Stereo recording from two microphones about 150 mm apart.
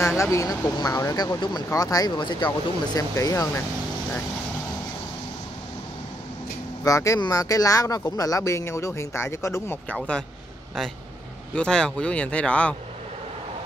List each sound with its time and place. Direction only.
0.2 s speech: 20° left (ahead or behind)
6.8 s speech: 20° left (ahead or behind)
11.5 s speech: 5° left (ahead or behind)